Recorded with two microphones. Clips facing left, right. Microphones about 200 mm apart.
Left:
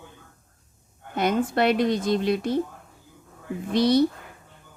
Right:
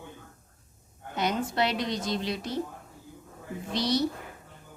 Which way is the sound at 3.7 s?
55° left (ahead or behind).